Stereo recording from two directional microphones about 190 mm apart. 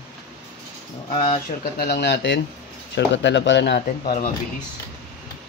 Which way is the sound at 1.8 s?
60° left (ahead or behind).